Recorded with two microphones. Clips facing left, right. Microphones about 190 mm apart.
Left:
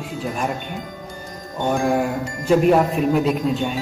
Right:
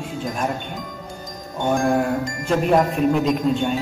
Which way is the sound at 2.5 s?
5° left (ahead or behind).